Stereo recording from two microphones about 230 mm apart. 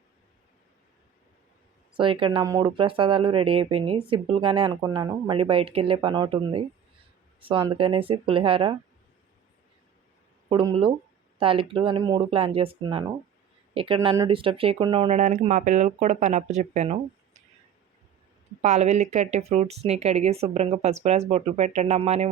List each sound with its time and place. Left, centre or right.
1.9 s speech: right
10.5 s speech: right
18.6 s speech: right